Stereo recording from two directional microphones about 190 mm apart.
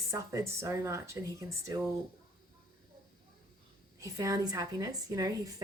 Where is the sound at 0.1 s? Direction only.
15° right (ahead or behind).